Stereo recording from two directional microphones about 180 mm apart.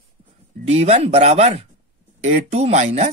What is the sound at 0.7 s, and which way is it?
Speech, 35° right (ahead or behind).